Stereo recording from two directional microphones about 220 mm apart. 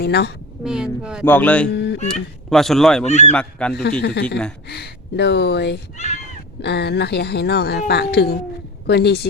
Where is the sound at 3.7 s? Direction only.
45° left (ahead or behind).